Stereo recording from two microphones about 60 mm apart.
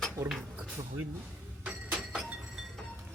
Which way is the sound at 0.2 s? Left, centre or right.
Right.